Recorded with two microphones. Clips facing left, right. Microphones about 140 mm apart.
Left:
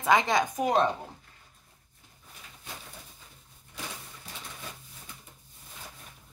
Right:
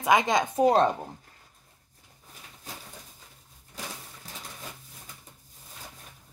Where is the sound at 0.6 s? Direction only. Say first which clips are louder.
Right 6 dB; 35° right (ahead or behind).